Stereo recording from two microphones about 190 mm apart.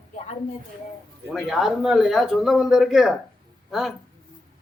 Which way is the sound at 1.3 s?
Centre (ahead or behind).